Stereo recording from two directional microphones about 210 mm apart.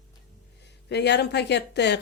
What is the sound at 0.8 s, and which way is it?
Speech, 55° left (ahead or behind).